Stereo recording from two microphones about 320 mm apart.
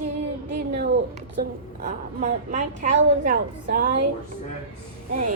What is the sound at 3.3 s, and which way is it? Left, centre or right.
Speech, right.